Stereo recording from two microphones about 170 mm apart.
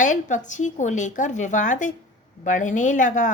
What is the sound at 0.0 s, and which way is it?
A woman's voice, 45° left (ahead or behind).